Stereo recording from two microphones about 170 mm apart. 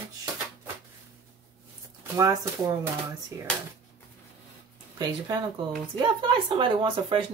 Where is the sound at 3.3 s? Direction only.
20° right (ahead or behind).